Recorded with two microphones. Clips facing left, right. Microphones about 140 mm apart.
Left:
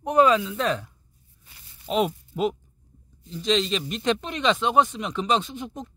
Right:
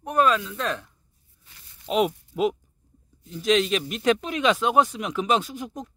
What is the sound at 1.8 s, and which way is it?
Speech, centre (ahead or behind).